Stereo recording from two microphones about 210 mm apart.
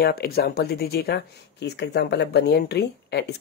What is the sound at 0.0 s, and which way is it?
Speech, 50° left (ahead or behind).